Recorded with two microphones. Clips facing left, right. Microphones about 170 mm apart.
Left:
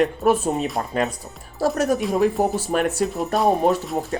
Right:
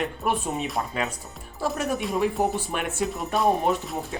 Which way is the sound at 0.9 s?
40° left (ahead or behind).